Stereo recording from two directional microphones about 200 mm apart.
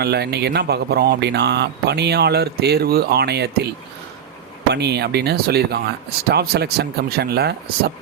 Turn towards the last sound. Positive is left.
turn(degrees=-50)  # may be behind; listen again after turning